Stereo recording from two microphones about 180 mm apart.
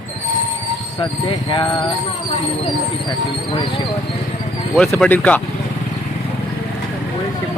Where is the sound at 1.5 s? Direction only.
25° left (ahead or behind).